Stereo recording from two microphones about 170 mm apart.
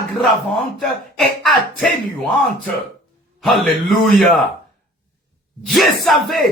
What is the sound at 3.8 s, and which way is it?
Speech, 5° left (ahead or behind).